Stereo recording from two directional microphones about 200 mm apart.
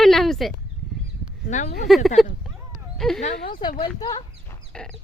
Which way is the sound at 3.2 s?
40° left (ahead or behind).